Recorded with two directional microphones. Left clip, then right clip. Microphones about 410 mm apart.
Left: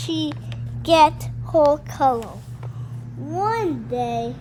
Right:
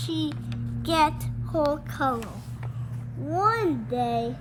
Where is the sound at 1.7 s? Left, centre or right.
Centre.